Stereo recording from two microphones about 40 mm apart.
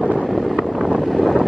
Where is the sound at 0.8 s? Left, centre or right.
Centre.